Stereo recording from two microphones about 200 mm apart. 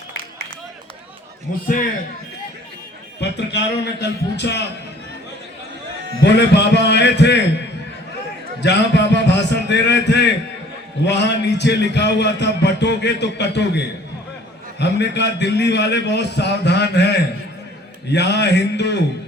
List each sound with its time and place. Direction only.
1.5 s a man's voice: 40° left (ahead or behind)
3.2 s a man's voice: 60° left (ahead or behind)
6.2 s a man's voice: 60° left (ahead or behind)